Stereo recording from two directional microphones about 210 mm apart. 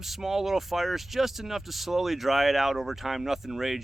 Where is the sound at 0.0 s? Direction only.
Centre (ahead or behind).